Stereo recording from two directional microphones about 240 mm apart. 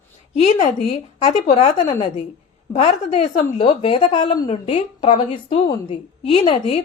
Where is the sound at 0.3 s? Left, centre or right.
Left.